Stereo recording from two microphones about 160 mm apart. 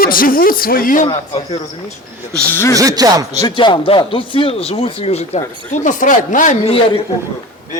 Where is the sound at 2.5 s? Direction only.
15° left (ahead or behind).